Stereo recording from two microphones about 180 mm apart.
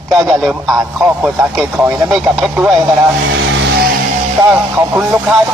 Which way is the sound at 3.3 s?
90° right.